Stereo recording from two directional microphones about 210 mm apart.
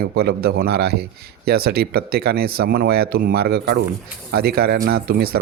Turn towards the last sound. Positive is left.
turn(degrees=-45)  # may be behind; listen again after turning